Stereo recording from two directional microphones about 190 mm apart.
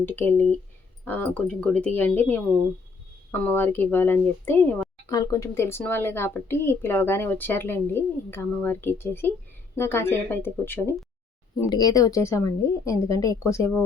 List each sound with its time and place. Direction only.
0.0 s speech: 10° left (ahead or behind)